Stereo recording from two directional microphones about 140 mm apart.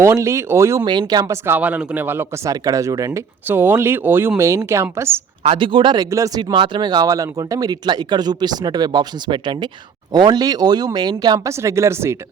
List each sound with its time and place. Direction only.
0.0 s speech: 20° right (ahead or behind)
0.9 s speech: 30° right (ahead or behind)
5.4 s speech: 40° right (ahead or behind); by 12.1 s 20° right (ahead or behind)